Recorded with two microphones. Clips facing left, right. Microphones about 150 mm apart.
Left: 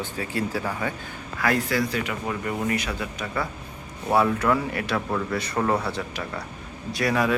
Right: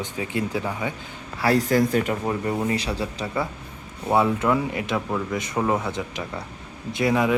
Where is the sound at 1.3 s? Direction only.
35° right (ahead or behind).